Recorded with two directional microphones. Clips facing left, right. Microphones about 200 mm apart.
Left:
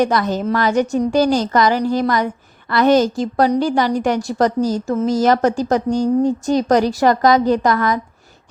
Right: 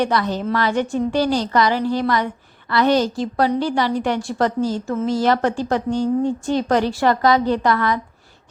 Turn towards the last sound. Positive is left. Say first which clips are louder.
# left 3 dB
turn(degrees=45)  # may be behind; listen again after turning